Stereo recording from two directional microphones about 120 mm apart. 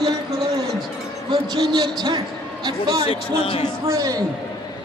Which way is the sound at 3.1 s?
55° left (ahead or behind).